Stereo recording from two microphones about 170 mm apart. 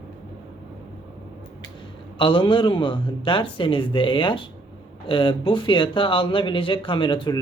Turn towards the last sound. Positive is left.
turn(degrees=30)  # may be behind; listen again after turning